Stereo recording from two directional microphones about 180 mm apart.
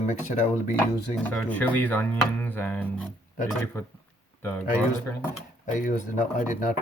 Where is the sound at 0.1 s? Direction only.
40° left (ahead or behind).